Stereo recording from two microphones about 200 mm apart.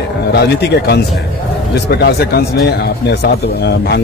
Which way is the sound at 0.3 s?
55° left (ahead or behind).